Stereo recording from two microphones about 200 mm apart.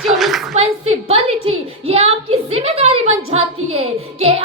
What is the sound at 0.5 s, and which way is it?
A woman's voice, 30° right (ahead or behind).